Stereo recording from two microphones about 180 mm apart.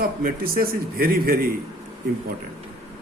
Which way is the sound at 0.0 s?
55° right (ahead or behind).